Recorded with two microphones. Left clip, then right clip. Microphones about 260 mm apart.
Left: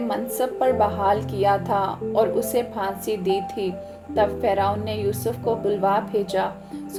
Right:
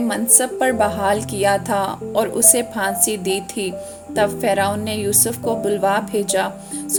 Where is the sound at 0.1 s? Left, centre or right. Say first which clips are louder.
Right 4 dB; right.